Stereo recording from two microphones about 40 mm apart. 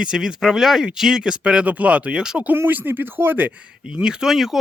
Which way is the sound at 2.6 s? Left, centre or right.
Right.